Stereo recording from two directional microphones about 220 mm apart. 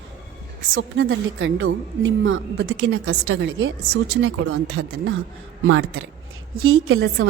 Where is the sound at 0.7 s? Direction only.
65° right (ahead or behind).